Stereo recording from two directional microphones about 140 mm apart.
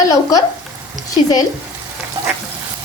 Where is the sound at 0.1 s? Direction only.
25° left (ahead or behind).